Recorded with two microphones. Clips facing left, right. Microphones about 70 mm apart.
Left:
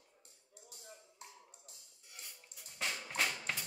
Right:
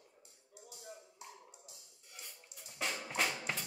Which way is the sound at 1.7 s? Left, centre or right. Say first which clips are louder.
Right 3 dB; left.